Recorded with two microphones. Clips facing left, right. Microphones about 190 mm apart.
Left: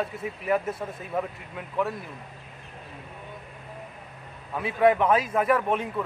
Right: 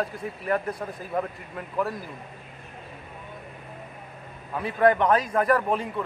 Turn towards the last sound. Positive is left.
turn(degrees=0)  # may be behind; listen again after turning